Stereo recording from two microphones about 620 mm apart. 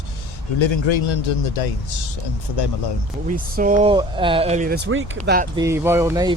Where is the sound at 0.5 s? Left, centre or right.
Left.